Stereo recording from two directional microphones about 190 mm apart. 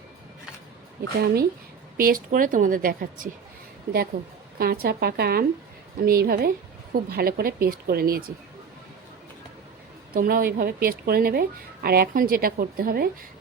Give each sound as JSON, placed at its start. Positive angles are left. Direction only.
{"t": 1.2, "sound": "a woman's voice", "side_deg": -55}
{"t": 10.2, "sound": "a woman's voice", "side_deg": -50}